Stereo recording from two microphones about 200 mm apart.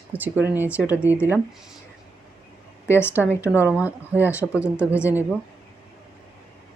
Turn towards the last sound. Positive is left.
turn(degrees=-10)  # may be behind; listen again after turning